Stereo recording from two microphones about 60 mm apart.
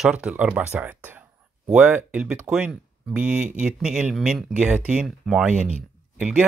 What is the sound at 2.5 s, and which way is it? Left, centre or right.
Speech, centre.